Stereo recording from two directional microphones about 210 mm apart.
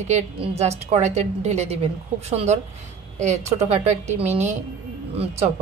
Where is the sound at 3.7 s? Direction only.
35° right (ahead or behind).